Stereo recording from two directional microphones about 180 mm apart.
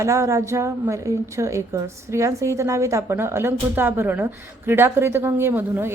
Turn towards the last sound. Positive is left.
turn(degrees=-10)  # may be behind; listen again after turning